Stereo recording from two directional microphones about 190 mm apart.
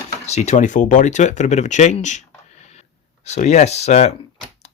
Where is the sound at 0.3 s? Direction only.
35° left (ahead or behind).